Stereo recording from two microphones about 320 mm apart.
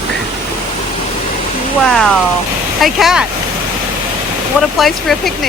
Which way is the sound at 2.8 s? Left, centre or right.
Centre.